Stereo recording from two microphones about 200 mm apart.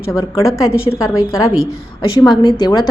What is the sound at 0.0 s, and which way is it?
A woman's voice, 15° left (ahead or behind).